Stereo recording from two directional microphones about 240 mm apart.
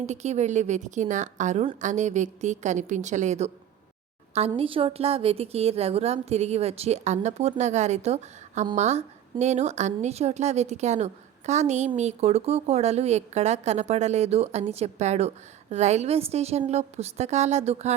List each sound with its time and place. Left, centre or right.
0.0 s a woman's voice: right